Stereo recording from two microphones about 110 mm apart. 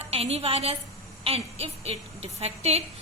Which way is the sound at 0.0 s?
65° right (ahead or behind).